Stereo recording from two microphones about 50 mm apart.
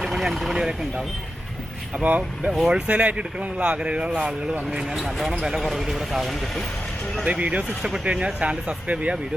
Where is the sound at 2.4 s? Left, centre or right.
Centre.